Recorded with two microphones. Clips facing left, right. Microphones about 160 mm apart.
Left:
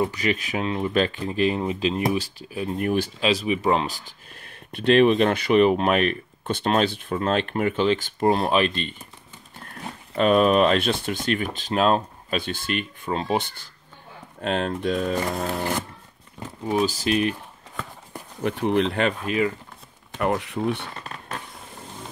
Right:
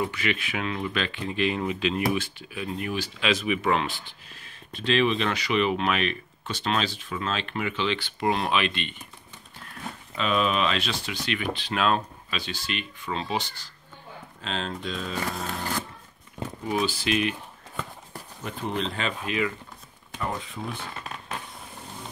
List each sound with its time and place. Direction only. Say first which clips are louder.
0.1 s speech: left 4 dB; 40° left (ahead or behind)
3.2 s speech: left 3 dB; 35° left (ahead or behind)
4.4 s speech: left 4 dB; 55° left (ahead or behind)
16.8 s speech: left 4 dB; 40° left (ahead or behind)
18.4 s speech: left 9 dB; 60° left (ahead or behind); by 19.5 s 40° left (ahead or behind)
20.2 s speech: left 8 dB; 70° left (ahead or behind)